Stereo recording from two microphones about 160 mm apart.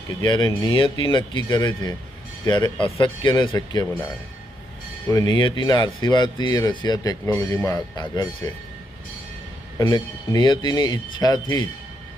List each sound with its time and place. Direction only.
0.2 s speech: 25° left (ahead or behind)
5.0 s speech: 25° left (ahead or behind)
9.7 s speech: 25° left (ahead or behind)